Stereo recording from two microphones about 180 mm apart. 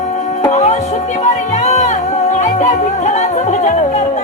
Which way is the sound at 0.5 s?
40° left (ahead or behind).